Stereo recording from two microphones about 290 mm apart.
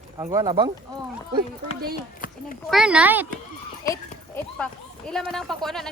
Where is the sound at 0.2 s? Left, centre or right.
Centre.